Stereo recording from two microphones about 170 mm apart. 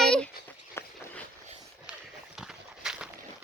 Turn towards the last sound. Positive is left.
turn(degrees=-5)  # may be behind; listen again after turning